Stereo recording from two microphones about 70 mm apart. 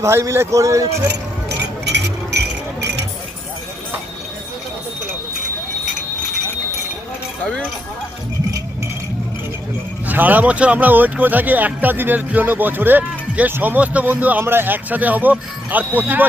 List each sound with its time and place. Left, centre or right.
0.0 s speech: right
10.1 s speech: right